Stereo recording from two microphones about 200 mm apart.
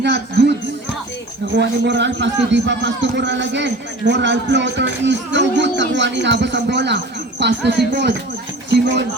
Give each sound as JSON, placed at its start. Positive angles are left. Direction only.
{"t": 0.0, "sound": "music", "side_deg": -55}
{"t": 1.5, "sound": "a man's voice", "side_deg": -60}